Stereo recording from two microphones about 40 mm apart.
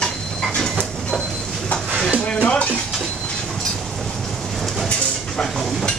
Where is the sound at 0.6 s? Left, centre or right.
Centre.